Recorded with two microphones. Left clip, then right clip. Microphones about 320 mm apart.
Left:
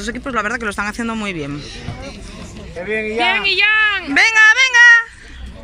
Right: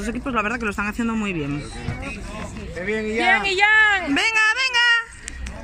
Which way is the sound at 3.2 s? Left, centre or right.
Right.